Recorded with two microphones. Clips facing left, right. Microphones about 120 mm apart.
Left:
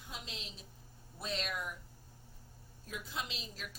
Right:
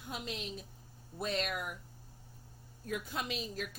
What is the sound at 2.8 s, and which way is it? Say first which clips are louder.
Speech: right 5 dB; 55° right (ahead or behind).